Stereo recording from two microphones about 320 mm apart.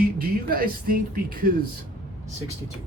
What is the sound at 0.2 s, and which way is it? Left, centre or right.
Speech, right.